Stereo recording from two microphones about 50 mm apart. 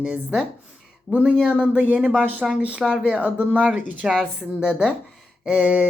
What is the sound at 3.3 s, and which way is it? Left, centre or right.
Speech, right.